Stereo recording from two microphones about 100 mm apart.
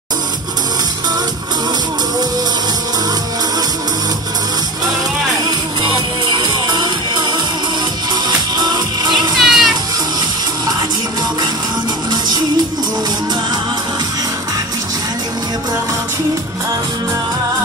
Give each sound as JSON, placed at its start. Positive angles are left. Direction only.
{"t": 5.4, "sound": "music", "side_deg": -50}
{"t": 8.3, "sound": "music", "side_deg": -45}
{"t": 9.4, "sound": "music", "side_deg": 0}
{"t": 12.1, "sound": "music", "side_deg": -45}